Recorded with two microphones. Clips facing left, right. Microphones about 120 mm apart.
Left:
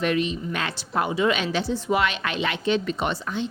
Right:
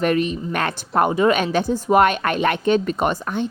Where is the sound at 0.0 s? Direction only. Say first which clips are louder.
Right 4 dB; 50° right (ahead or behind).